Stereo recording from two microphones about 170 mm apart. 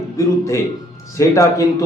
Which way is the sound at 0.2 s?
20° left (ahead or behind).